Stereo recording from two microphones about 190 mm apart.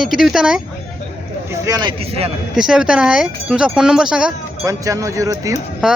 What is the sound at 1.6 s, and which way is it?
Speech, 20° right (ahead or behind).